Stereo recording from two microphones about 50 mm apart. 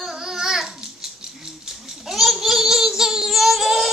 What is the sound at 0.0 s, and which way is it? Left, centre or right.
Babbling, centre.